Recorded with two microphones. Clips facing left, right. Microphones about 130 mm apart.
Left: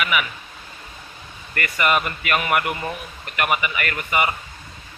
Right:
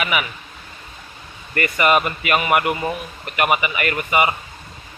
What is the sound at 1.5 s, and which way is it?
Speech, 20° right (ahead or behind).